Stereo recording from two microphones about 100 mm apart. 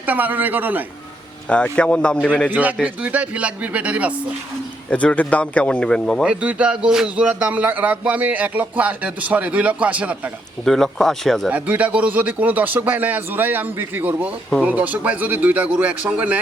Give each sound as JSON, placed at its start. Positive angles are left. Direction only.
{"t": 0.0, "sound": "a man's voice", "side_deg": -15}
{"t": 1.5, "sound": "speech", "side_deg": 10}
{"t": 2.5, "sound": "a man's voice", "side_deg": -15}
{"t": 4.9, "sound": "speech", "side_deg": 15}
{"t": 6.2, "sound": "a man's voice", "side_deg": -15}
{"t": 10.7, "sound": "speech", "side_deg": 5}
{"t": 11.5, "sound": "a man's voice", "side_deg": -15}